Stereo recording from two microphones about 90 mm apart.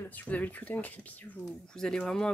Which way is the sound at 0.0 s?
20° left (ahead or behind).